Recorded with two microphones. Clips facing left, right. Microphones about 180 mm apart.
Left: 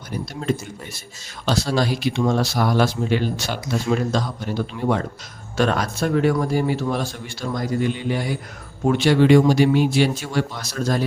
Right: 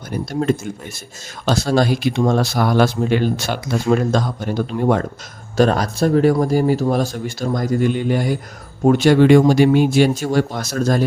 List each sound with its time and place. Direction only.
0.3 s speech: 50° right (ahead or behind)
5.5 s speech: 35° right (ahead or behind)